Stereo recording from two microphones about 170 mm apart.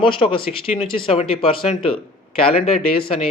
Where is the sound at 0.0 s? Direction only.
30° left (ahead or behind).